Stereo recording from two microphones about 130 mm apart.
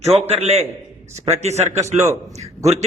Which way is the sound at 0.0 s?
55° right (ahead or behind).